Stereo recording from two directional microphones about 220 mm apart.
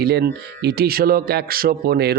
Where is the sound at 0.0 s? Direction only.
45° right (ahead or behind).